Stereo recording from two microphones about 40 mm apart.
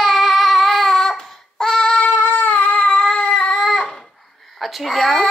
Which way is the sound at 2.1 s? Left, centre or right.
Left.